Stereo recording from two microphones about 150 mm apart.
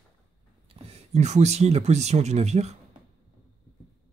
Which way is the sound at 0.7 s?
45° right (ahead or behind).